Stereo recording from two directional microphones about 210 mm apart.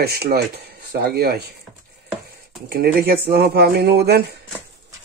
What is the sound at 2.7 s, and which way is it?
Speech, 45° right (ahead or behind).